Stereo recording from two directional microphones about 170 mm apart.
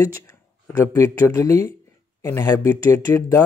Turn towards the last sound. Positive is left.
turn(degrees=15)  # may be behind; listen again after turning